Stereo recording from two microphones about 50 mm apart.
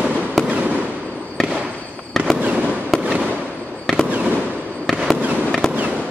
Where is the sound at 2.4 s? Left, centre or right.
Right.